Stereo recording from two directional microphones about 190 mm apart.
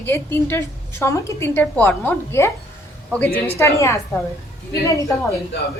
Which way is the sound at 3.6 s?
15° left (ahead or behind).